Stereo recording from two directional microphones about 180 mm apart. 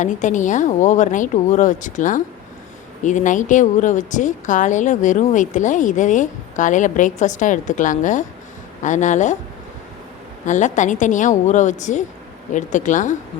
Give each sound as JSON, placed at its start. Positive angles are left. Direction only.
{"t": 0.0, "sound": "a woman's voice", "side_deg": 45}
{"t": 10.4, "sound": "a woman's voice", "side_deg": 45}